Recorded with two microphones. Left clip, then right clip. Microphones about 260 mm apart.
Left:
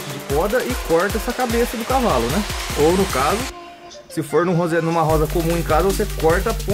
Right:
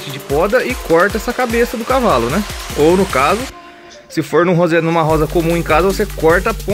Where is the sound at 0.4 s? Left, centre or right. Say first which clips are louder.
Right 6 dB; centre.